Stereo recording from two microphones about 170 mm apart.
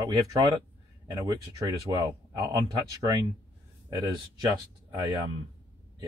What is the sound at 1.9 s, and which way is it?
Speech, 20° right (ahead or behind).